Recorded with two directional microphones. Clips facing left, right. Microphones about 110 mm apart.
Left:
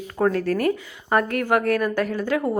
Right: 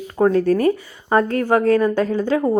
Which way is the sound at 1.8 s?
15° right (ahead or behind).